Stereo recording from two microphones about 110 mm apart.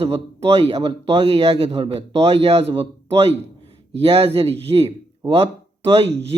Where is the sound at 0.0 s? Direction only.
60° right (ahead or behind).